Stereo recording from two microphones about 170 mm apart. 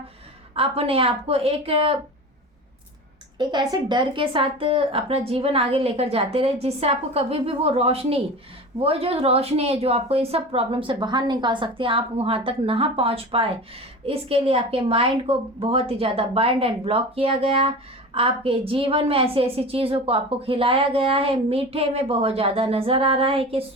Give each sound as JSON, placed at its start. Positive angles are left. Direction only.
{"t": 0.5, "sound": "a woman's voice", "side_deg": -35}
{"t": 3.3, "sound": "a woman's voice", "side_deg": -25}